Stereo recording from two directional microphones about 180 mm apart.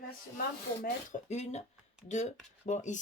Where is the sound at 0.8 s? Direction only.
45° left (ahead or behind).